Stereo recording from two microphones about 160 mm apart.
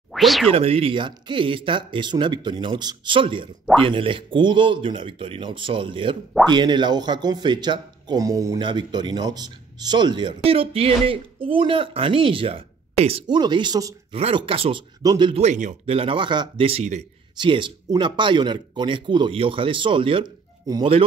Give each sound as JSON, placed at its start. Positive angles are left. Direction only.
{"t": 0.1, "sound": "speech", "side_deg": 0}
{"t": 0.5, "sound": "speech", "side_deg": -35}
{"t": 14.1, "sound": "speech", "side_deg": -35}
{"t": 15.4, "sound": "speech", "side_deg": -50}
{"t": 15.9, "sound": "speech", "side_deg": -35}
{"t": 17.4, "sound": "a man's voice", "side_deg": -30}